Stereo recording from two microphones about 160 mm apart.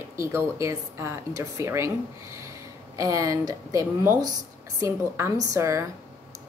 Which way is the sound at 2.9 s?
20° right (ahead or behind).